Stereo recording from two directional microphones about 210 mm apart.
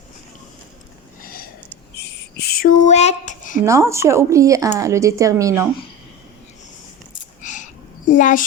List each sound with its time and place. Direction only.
1.2 s sniff: 45° left (ahead or behind)
2.0 s a sound: 50° left (ahead or behind); by 3.6 s 35° left (ahead or behind)
3.6 s speech: 15° right (ahead or behind)
7.4 s cricket: 35° left (ahead or behind)
8.1 s speech: 40° left (ahead or behind)